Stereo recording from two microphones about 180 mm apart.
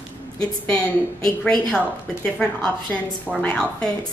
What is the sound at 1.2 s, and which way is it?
A woman's voice, 5° left (ahead or behind).